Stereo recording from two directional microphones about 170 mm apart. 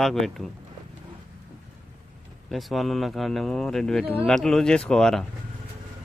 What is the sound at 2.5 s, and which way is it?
Speech, centre (ahead or behind).